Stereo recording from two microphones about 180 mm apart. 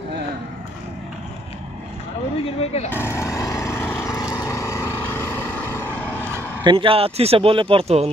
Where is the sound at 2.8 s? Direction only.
15° left (ahead or behind).